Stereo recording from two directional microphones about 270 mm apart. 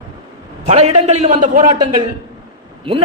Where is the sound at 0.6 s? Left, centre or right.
Right.